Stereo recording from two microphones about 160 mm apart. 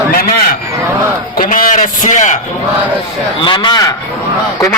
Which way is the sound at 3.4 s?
30° left (ahead or behind).